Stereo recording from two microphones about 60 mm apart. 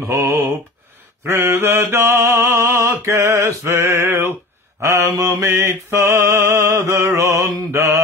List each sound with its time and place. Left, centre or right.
0.0 s mantra: right
5.2 s a sound: right
6.8 s mantra: right